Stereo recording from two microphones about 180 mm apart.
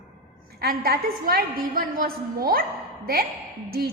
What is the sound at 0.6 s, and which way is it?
A woman's voice, 60° right (ahead or behind).